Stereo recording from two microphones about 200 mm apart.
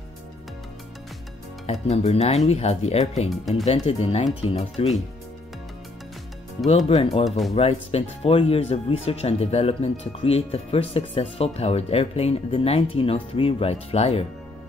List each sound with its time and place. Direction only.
1.7 s speech: 35° left (ahead or behind)
3.3 s speech: centre (ahead or behind)
3.6 s speech: 30° left (ahead or behind)
6.9 s speech: 30° left (ahead or behind)
7.2 s speech: centre (ahead or behind)
7.5 s speech: 30° left (ahead or behind)